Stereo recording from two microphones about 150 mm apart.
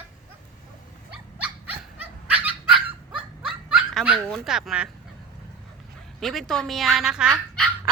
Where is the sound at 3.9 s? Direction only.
Centre (ahead or behind).